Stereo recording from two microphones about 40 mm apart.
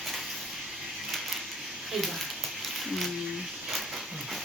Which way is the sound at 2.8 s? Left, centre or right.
Centre.